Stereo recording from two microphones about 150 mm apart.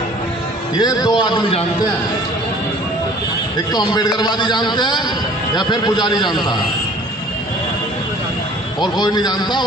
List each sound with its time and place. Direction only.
0.7 s a man's voice: 25° left (ahead or behind)
3.7 s a man's voice: 30° left (ahead or behind)
8.8 s a man's voice: 25° left (ahead or behind)